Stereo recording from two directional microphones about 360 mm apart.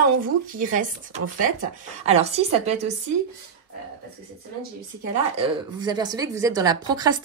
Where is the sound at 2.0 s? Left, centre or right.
Centre.